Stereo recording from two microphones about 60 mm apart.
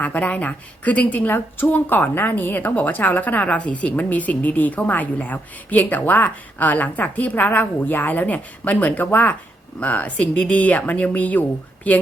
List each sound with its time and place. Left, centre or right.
0.0 s a woman's voice: left